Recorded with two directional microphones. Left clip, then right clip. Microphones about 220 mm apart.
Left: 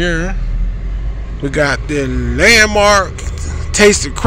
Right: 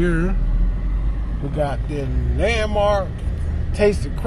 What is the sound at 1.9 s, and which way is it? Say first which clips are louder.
Speech: left 11 dB; 25° left (ahead or behind).